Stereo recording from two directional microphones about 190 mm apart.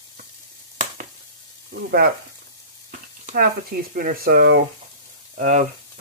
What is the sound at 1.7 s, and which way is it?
Frying, 50° right (ahead or behind).